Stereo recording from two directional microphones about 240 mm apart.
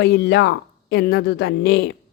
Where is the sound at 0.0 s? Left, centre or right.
Left.